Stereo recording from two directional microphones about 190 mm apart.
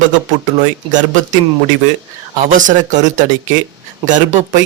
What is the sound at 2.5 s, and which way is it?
Speech, 45° right (ahead or behind).